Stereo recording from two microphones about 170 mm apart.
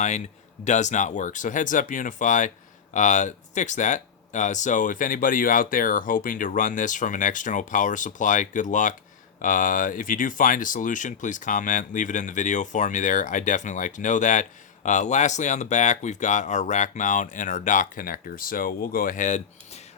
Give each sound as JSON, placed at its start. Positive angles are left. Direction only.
{"t": 0.6, "sound": "speech", "side_deg": 45}